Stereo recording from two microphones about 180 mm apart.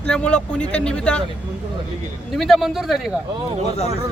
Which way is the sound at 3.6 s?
40° left (ahead or behind).